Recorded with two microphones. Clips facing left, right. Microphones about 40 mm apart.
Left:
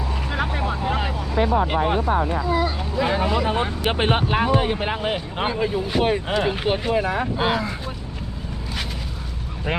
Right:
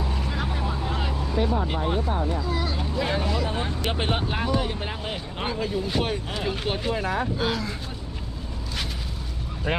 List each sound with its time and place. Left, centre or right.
0.3 s vehicle: left
1.4 s speech: left
2.4 s speech: left
3.5 s speech: left